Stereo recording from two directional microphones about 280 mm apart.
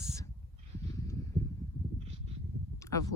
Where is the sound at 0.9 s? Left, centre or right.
Centre.